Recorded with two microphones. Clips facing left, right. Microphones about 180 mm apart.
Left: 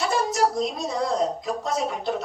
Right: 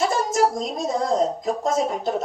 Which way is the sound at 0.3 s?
45° right (ahead or behind).